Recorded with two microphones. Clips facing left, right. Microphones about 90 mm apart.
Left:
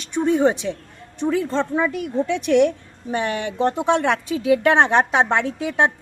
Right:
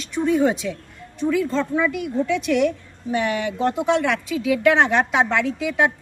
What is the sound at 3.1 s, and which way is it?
A woman's voice, 35° left (ahead or behind).